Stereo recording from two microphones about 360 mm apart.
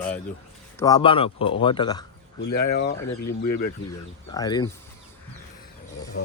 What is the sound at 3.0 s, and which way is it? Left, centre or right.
Speech, left.